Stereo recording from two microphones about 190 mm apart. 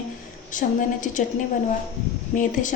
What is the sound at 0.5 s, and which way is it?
Speech, 40° left (ahead or behind).